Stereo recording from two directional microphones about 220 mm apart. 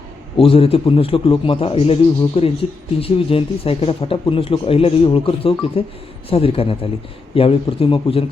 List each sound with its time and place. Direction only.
0.3 s a man's voice: 25° left (ahead or behind)